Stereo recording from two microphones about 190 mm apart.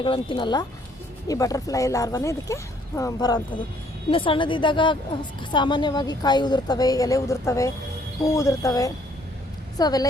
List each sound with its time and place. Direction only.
0.0 s a woman's voice: 25° left (ahead or behind)